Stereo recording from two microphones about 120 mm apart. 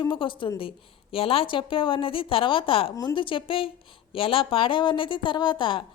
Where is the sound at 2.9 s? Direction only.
30° left (ahead or behind).